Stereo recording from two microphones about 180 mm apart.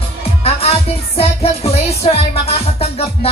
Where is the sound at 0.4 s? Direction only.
35° left (ahead or behind).